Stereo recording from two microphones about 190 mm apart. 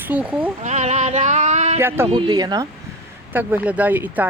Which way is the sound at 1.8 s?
10° right (ahead or behind).